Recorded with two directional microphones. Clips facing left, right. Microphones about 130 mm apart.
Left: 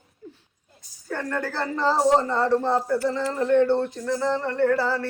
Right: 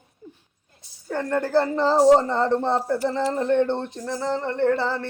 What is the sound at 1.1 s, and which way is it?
Speech, 20° right (ahead or behind).